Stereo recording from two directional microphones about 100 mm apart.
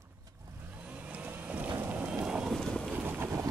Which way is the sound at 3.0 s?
20° right (ahead or behind).